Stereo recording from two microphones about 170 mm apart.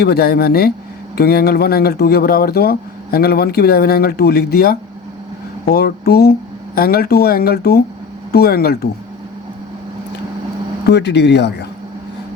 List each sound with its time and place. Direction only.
0.0 s speech: 70° left (ahead or behind)
10.8 s speech: 85° left